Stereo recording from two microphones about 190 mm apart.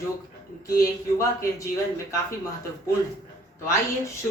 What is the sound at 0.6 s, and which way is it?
Speech, 15° left (ahead or behind).